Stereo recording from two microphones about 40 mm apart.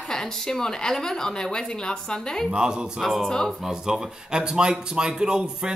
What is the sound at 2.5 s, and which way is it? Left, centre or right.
Speech, right.